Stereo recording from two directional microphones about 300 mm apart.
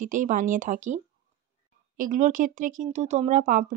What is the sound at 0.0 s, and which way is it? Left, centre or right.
Speech, right.